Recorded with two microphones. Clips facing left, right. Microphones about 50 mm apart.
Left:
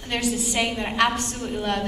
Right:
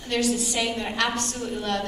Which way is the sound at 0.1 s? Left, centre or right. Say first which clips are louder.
Right 1 dB; left.